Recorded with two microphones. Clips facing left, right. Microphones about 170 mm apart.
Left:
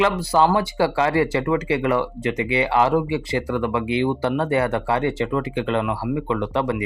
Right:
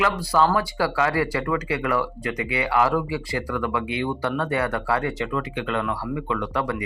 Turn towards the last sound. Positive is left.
turn(degrees=25)  # may be behind; listen again after turning